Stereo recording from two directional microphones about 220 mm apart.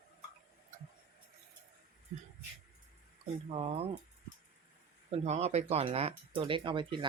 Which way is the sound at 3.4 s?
25° right (ahead or behind).